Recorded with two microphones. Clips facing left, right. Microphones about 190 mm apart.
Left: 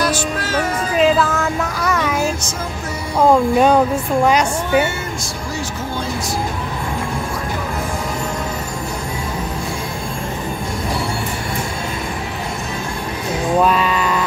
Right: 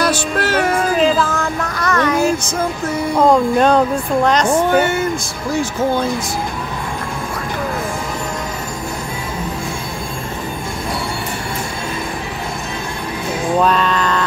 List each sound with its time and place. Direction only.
0.0 s music: 65° right (ahead or behind)
0.9 s music: centre (ahead or behind)
3.3 s speech: 5° left (ahead or behind)
13.6 s a sound: 5° left (ahead or behind)